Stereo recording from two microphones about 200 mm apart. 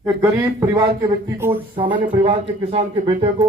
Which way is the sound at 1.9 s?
25° right (ahead or behind).